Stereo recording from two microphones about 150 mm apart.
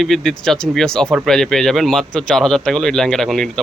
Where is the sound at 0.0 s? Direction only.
Centre (ahead or behind).